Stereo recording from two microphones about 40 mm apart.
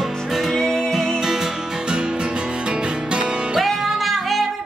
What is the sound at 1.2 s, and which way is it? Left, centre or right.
Music, centre.